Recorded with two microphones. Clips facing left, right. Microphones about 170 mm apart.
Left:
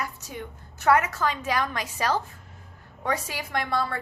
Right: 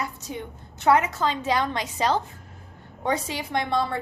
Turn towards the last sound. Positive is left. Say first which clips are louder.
# right 3 dB
turn(degrees=-20)  # may be behind; listen again after turning